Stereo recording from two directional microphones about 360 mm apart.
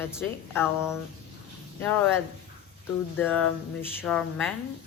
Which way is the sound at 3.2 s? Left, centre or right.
Centre.